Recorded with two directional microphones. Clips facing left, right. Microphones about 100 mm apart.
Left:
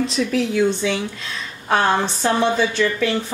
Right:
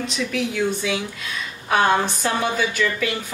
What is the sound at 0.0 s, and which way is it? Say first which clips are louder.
A woman's voice: left 5 dB; 35° left (ahead or behind).